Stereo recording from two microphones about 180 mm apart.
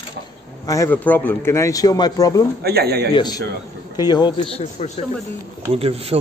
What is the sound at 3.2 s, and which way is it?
A man's voice, 25° left (ahead or behind).